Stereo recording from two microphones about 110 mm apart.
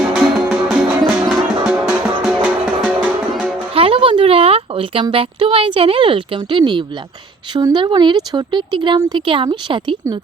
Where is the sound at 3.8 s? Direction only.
55° right (ahead or behind).